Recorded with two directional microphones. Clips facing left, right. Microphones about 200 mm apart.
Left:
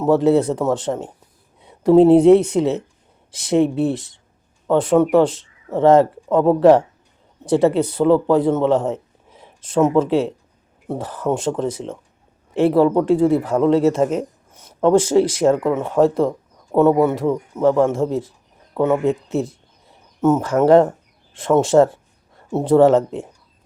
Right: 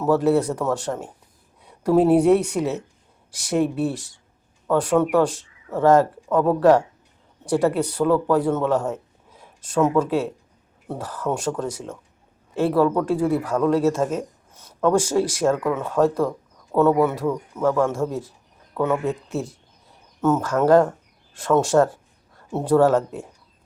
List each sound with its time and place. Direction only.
0.0 s speech: 20° left (ahead or behind)